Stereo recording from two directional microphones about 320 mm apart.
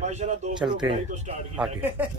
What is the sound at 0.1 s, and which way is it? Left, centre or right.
Speech, right.